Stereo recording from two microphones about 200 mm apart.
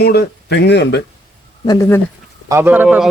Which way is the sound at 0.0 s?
50° left (ahead or behind).